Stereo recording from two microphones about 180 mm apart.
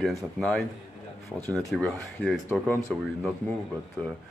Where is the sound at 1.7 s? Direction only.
Centre (ahead or behind).